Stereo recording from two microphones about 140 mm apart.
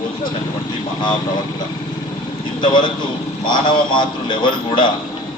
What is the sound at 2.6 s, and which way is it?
A man's voice, 35° left (ahead or behind).